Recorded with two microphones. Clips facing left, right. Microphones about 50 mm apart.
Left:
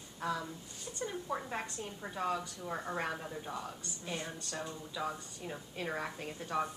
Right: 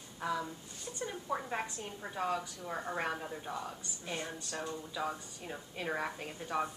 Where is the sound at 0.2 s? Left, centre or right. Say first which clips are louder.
Right 1 dB; centre.